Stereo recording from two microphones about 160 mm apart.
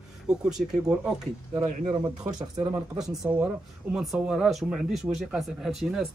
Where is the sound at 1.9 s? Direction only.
25° right (ahead or behind).